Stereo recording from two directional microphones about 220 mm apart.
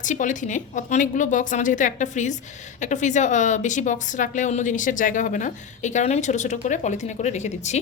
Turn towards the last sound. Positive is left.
turn(degrees=30)  # may be behind; listen again after turning